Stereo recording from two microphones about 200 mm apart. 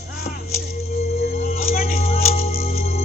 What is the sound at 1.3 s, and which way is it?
Music, 35° left (ahead or behind).